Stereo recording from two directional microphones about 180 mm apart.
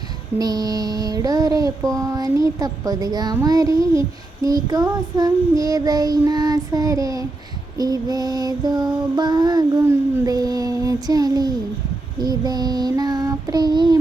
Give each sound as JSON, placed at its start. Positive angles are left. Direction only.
{"t": 0.3, "sound": "mantra", "side_deg": -20}
{"t": 12.2, "sound": "child singing", "side_deg": -20}